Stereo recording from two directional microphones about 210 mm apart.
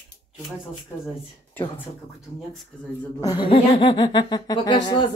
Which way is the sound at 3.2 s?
20° left (ahead or behind).